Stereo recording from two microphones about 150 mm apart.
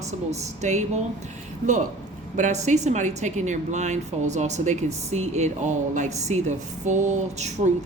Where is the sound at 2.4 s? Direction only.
50° right (ahead or behind).